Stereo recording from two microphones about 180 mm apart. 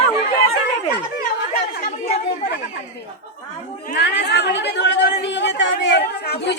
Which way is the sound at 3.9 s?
70° left (ahead or behind).